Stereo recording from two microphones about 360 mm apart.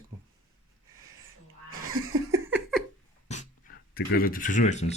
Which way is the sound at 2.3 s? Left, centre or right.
Centre.